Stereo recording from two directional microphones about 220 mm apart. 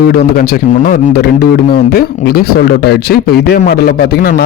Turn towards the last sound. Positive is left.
turn(degrees=45)  # may be behind; listen again after turning